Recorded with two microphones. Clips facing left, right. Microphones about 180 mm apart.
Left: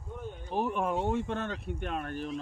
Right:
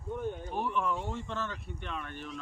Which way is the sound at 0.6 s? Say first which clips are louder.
Left 4 dB; 45° left (ahead or behind).